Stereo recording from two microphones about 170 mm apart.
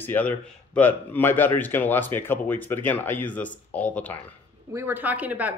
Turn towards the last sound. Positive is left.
turn(degrees=-10)  # may be behind; listen again after turning